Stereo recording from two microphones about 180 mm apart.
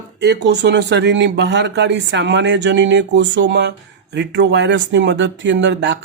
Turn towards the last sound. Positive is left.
turn(degrees=-80)